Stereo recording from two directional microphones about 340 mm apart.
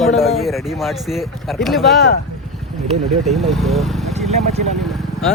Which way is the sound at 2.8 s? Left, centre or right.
Centre.